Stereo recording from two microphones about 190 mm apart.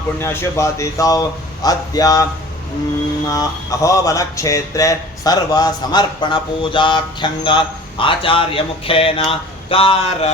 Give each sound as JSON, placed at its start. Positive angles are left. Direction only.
{"t": 0.2, "sound": "speech", "side_deg": 15}
{"t": 3.2, "sound": "speech", "side_deg": 20}